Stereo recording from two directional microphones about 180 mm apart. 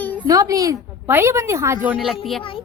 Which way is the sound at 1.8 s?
Centre (ahead or behind).